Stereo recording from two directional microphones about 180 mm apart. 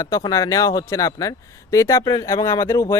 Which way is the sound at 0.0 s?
20° left (ahead or behind).